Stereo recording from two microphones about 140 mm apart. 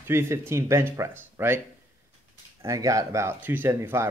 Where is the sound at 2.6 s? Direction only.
25° right (ahead or behind).